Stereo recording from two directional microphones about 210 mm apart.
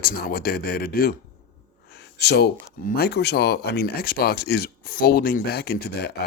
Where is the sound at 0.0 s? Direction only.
45° left (ahead or behind).